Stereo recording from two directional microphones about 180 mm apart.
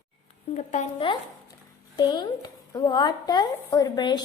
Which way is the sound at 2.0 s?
20° left (ahead or behind).